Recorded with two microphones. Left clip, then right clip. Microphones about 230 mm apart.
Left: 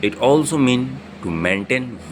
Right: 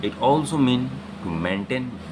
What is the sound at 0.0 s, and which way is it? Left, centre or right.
Speech, centre.